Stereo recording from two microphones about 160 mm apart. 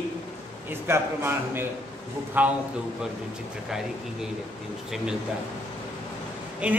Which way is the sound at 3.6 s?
5° right (ahead or behind).